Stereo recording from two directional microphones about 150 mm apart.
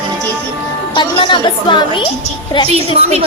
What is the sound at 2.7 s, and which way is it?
Speech, 45° right (ahead or behind).